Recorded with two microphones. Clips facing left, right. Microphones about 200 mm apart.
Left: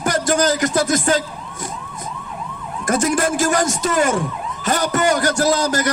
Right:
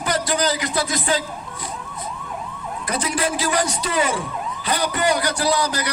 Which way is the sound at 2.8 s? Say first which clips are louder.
Left 6 dB; 45° left (ahead or behind).